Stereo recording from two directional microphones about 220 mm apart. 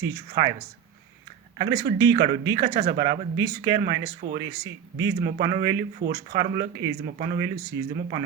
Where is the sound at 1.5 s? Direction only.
15° right (ahead or behind).